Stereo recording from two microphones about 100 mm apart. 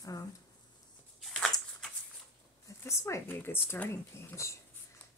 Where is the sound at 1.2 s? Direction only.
Centre (ahead or behind).